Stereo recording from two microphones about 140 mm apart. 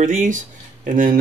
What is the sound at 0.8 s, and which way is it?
Speech, 80° right.